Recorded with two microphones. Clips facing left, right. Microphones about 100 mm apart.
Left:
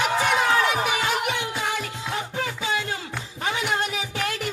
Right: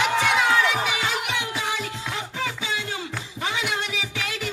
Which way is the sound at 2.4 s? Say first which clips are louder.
Left 2 dB; 50° left (ahead or behind).